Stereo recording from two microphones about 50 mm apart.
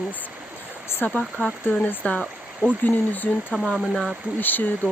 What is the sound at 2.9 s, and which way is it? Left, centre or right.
Speech, left.